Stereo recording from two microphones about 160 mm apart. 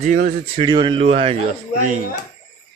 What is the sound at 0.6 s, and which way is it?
Speech, 30° right (ahead or behind).